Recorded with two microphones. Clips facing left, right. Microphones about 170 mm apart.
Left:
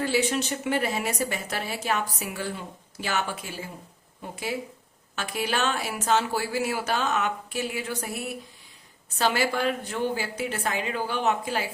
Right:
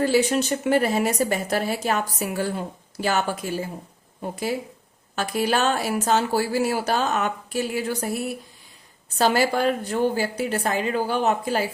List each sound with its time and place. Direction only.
0.0 s a woman's voice: 40° right (ahead or behind)